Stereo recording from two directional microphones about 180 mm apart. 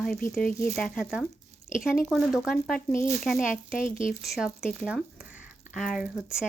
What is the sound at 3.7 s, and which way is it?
Speech, 45° left (ahead or behind).